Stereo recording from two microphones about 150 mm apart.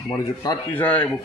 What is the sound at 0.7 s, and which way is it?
Speech, 10° left (ahead or behind).